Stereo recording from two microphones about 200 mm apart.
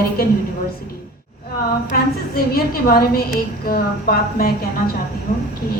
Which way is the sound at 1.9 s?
50° left (ahead or behind).